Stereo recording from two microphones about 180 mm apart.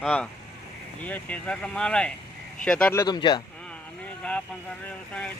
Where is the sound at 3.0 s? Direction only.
25° left (ahead or behind).